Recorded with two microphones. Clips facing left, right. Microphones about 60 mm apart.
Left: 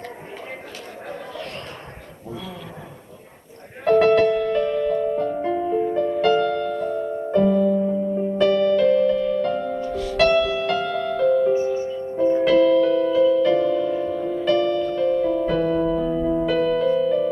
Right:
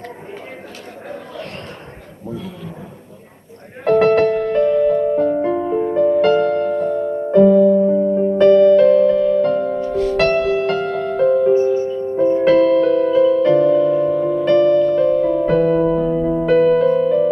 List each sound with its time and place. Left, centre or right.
3.8 s music: right
12.5 s music: right
14.4 s music: right
16.5 s music: right